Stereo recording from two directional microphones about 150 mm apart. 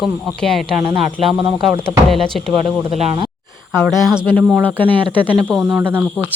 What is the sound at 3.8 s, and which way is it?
Speech, 5° right (ahead or behind).